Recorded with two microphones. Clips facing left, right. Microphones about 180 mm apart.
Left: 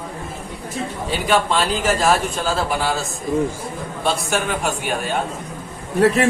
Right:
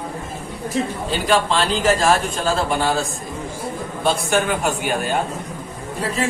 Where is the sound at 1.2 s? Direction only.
5° left (ahead or behind).